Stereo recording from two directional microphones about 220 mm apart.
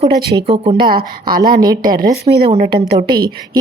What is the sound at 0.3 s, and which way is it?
Speech, 25° right (ahead or behind).